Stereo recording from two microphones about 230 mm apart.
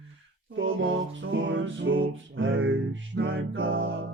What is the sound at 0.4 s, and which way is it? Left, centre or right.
Music, right.